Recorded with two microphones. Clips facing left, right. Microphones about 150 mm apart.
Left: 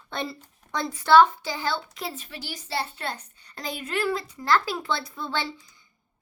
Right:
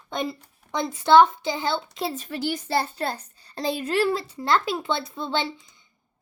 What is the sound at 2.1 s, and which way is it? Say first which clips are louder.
A child's voice: right 10 dB; 45° right (ahead or behind).